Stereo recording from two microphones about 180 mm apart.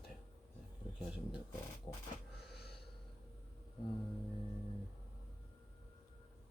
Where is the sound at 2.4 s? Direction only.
65° left (ahead or behind).